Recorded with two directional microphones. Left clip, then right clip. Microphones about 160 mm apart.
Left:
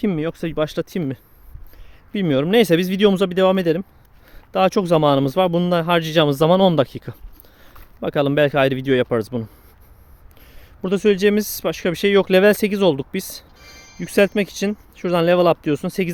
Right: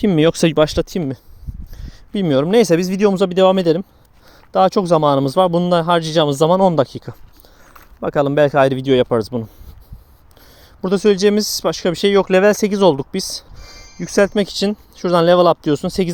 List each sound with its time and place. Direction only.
0.2 s speech: 70° right (ahead or behind)
0.6 s speech: 40° right (ahead or behind)
2.1 s speech: 10° right (ahead or behind)
3.2 s speech: 15° right (ahead or behind)
4.3 s speech: 10° right (ahead or behind)
10.8 s speech: 10° right (ahead or behind)
12.1 s speech: 5° left (ahead or behind); by 13.2 s 10° right (ahead or behind)
13.2 s music: 10° left (ahead or behind)
14.0 s speech: 10° right (ahead or behind)